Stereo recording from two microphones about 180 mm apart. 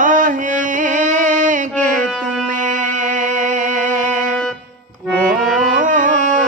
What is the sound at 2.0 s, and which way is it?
Music, centre (ahead or behind).